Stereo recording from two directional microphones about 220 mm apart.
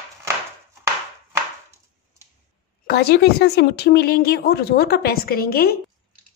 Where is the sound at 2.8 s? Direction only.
45° left (ahead or behind).